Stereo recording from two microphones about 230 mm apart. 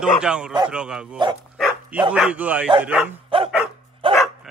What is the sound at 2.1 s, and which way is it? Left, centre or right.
Speech, centre.